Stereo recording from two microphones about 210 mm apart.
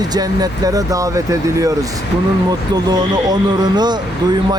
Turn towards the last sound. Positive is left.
turn(degrees=-20)  # may be behind; listen again after turning